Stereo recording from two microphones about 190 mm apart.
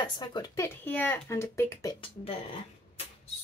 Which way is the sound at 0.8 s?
10° left (ahead or behind).